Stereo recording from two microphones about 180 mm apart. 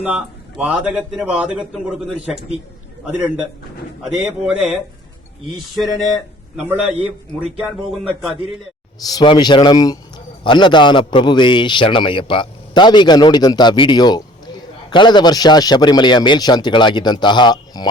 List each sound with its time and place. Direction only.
0.0 s a man's voice: 5° right (ahead or behind)
4.0 s a man's voice: centre (ahead or behind)
9.1 s a man's voice: 25° left (ahead or behind)